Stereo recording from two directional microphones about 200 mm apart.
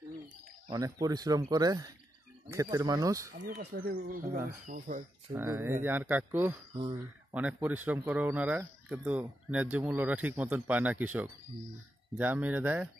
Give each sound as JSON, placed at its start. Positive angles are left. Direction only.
{"t": 0.7, "sound": "speech", "side_deg": -20}
{"t": 3.4, "sound": "speech", "side_deg": -45}
{"t": 5.3, "sound": "speech", "side_deg": -10}